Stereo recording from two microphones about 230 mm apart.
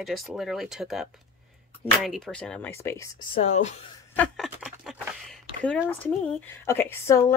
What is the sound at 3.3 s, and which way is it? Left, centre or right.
Speech, left.